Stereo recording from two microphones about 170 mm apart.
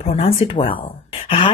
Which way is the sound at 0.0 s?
35° left (ahead or behind).